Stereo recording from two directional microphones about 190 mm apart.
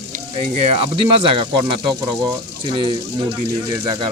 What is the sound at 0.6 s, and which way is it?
Speech, 30° right (ahead or behind).